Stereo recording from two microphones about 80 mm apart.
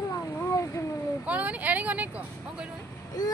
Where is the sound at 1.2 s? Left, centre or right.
Centre.